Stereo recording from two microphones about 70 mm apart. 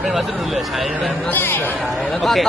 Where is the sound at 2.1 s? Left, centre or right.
Centre.